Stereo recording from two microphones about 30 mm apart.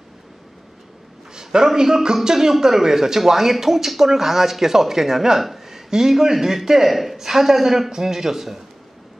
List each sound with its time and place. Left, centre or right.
1.3 s a man's voice: right
5.4 s a sound: centre
5.9 s speech: centre